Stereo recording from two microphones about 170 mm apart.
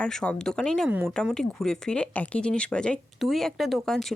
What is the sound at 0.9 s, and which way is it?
Speech, 10° right (ahead or behind).